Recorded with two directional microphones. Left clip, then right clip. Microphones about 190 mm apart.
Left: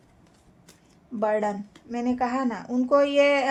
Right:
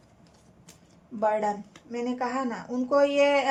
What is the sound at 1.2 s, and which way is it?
A woman's voice, 45° left (ahead or behind).